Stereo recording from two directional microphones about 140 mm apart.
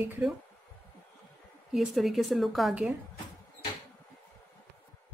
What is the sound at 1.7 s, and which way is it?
A woman's voice, centre (ahead or behind).